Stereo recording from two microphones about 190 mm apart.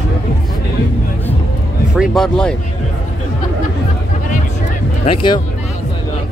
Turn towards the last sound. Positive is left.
turn(degrees=25)  # may be behind; listen again after turning